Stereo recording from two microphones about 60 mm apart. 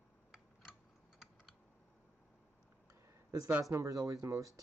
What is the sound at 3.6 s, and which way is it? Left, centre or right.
Speech, right.